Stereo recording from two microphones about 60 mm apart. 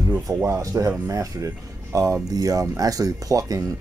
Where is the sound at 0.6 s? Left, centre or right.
Right.